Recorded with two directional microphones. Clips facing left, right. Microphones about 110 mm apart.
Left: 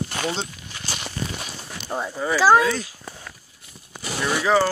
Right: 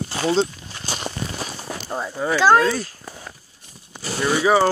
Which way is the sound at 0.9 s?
40° right (ahead or behind).